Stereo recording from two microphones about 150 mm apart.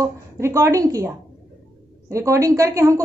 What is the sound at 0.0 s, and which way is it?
A woman's voice, 20° right (ahead or behind).